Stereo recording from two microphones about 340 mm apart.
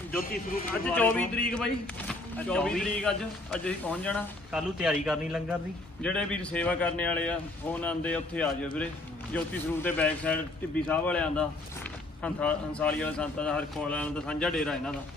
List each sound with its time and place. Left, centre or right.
0.2 s speech: left
0.9 s speech: centre